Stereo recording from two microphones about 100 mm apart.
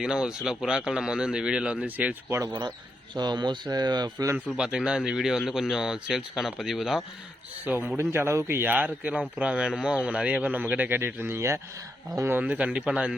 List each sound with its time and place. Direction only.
0.0 s a man's voice: 5° right (ahead or behind)
2.4 s speech: 45° right (ahead or behind)
4.4 s a man's voice: 10° right (ahead or behind)
7.9 s a man's voice: 25° right (ahead or behind)
12.3 s a man's voice: 15° right (ahead or behind)